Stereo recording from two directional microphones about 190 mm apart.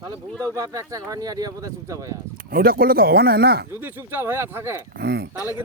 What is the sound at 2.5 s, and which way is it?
Speech, 50° right (ahead or behind).